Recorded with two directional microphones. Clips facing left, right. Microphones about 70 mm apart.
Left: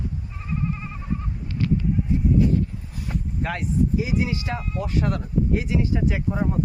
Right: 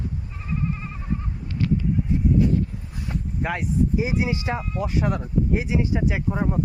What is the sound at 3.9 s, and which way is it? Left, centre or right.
Speech, right.